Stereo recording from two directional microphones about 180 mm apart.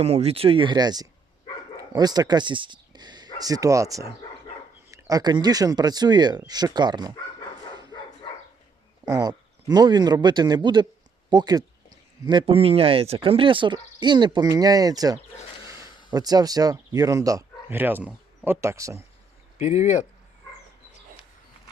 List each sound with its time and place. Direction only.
0.0 s speech: 35° right (ahead or behind)
9.0 s speech: 20° right (ahead or behind)
19.5 s speech: 40° left (ahead or behind)